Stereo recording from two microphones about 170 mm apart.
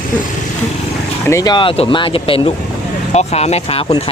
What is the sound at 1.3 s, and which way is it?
Speech, 20° left (ahead or behind).